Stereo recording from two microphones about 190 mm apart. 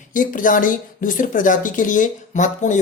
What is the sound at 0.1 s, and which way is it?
A woman's voice, 45° left (ahead or behind).